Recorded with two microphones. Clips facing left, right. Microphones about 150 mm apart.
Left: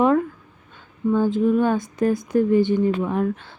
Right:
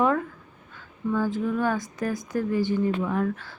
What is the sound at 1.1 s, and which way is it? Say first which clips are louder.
Speech: left 7 dB; 20° left (ahead or behind).